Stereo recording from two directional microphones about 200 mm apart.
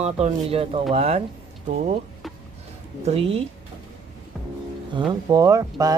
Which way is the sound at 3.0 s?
30° right (ahead or behind).